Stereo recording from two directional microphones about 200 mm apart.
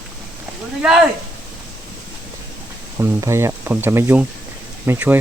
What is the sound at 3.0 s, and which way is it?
Speech, 15° right (ahead or behind).